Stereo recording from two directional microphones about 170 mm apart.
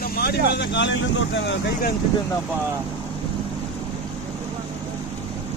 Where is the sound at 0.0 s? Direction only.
65° left (ahead or behind); by 1.9 s 90° left.